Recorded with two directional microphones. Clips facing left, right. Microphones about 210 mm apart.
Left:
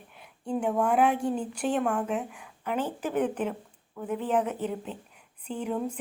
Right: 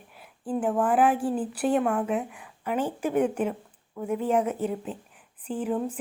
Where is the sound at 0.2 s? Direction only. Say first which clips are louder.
Right 1 dB; 5° right (ahead or behind).